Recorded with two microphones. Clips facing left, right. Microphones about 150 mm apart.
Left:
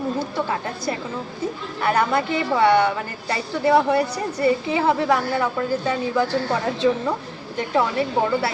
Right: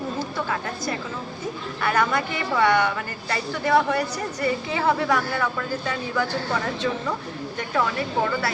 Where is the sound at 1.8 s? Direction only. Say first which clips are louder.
Left 3 dB; 30° left (ahead or behind).